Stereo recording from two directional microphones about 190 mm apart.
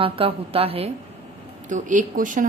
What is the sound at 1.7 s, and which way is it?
Speech, 40° right (ahead or behind).